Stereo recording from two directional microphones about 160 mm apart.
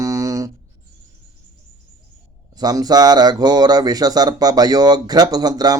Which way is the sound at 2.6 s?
25° right (ahead or behind).